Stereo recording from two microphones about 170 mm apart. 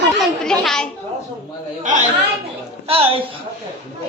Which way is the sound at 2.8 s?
35° right (ahead or behind).